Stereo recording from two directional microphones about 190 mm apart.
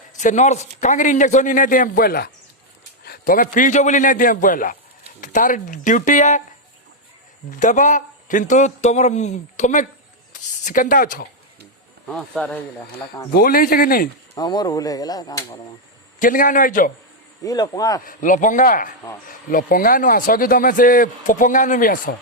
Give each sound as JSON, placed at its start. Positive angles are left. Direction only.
{"t": 0.2, "sound": "a man's voice", "side_deg": 40}
{"t": 7.5, "sound": "a man's voice", "side_deg": 40}
{"t": 12.0, "sound": "speech", "side_deg": 5}
{"t": 13.3, "sound": "speech", "side_deg": 50}
{"t": 14.3, "sound": "speech", "side_deg": 20}
{"t": 16.2, "sound": "speech", "side_deg": 45}
{"t": 17.4, "sound": "speech", "side_deg": 20}
{"t": 18.0, "sound": "speech", "side_deg": 45}